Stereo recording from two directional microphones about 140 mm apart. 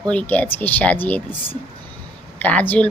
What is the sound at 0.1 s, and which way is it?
Speech, 10° left (ahead or behind).